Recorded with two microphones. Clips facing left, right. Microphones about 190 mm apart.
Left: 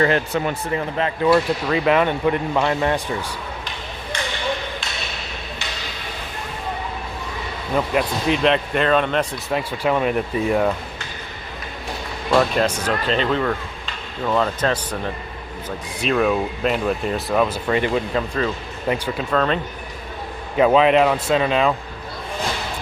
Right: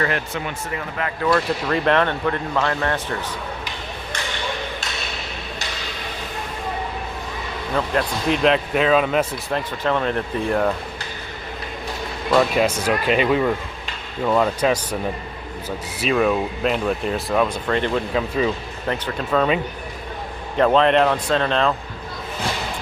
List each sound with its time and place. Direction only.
0.4 s speech: 30° left (ahead or behind)
1.3 s speech: 5° left (ahead or behind)
7.8 s speech: 5° left (ahead or behind)
9.6 s speech: 10° left (ahead or behind)
12.3 s speech: 5° right (ahead or behind)
18.1 s speech: 5° right (ahead or behind)
18.9 s speech: 10° left (ahead or behind)
19.3 s speech: 5° right (ahead or behind)
20.6 s speech: 5° left (ahead or behind)